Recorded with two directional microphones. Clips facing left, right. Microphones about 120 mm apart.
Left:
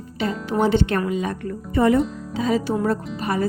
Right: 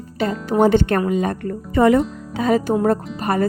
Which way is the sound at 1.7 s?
90° right.